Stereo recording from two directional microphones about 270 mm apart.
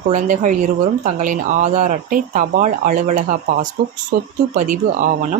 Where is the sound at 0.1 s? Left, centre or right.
Right.